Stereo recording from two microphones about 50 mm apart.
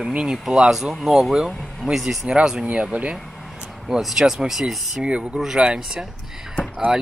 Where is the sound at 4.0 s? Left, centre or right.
Centre.